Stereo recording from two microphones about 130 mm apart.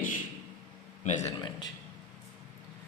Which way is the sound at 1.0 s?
65° left (ahead or behind).